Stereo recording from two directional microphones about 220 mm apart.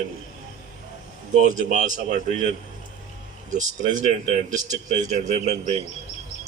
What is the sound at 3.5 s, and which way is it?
Speech, 35° right (ahead or behind).